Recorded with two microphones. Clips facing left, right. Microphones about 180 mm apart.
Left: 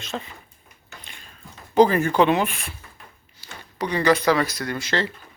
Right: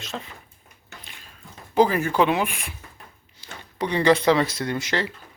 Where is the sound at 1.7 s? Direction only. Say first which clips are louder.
Left 3 dB; 5° right (ahead or behind).